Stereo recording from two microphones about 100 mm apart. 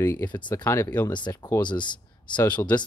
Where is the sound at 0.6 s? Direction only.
30° left (ahead or behind).